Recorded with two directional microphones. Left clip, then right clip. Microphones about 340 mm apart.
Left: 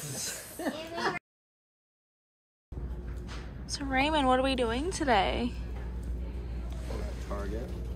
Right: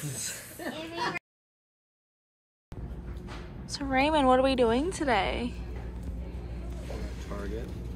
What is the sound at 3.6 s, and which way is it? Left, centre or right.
Speech, centre.